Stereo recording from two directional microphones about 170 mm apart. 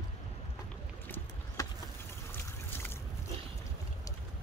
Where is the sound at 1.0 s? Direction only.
10° left (ahead or behind).